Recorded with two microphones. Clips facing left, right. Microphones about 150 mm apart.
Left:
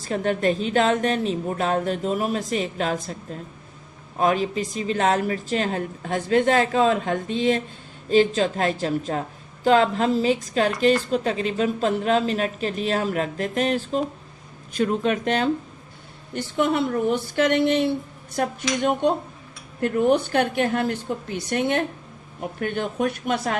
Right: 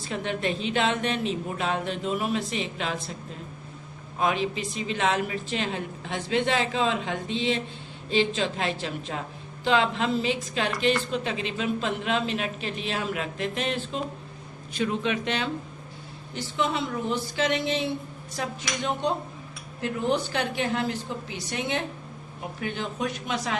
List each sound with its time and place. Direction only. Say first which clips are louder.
0.0 s speech: left 7 dB; 45° left (ahead or behind)
4.2 s a woman's voice: left 5 dB; 40° left (ahead or behind)